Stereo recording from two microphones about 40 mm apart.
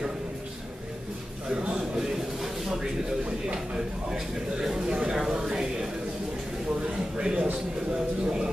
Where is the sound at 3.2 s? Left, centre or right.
Right.